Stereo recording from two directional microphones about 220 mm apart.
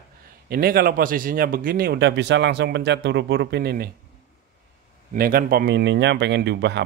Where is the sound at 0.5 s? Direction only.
45° right (ahead or behind).